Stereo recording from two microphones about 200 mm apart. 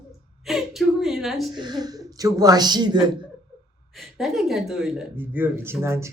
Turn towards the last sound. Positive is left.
turn(degrees=-15)  # may be behind; listen again after turning